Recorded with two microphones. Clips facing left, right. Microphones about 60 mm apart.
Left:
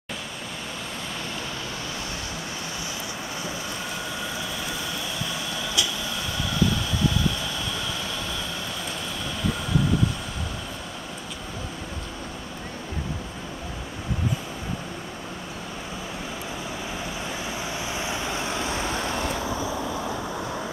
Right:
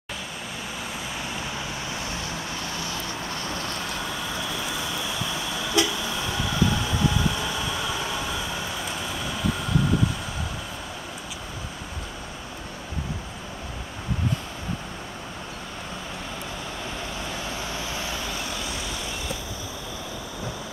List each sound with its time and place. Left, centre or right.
5.8 s train: right
7.3 s vehicle: centre
9.3 s vehicle: centre
17.5 s vehicle: centre; by 19.1 s left